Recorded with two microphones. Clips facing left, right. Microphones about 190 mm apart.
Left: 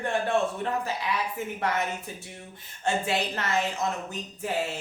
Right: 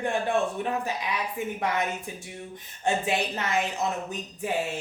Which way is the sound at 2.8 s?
15° right (ahead or behind).